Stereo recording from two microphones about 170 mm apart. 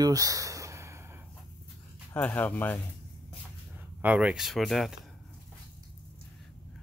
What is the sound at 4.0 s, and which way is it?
Speech, 10° right (ahead or behind).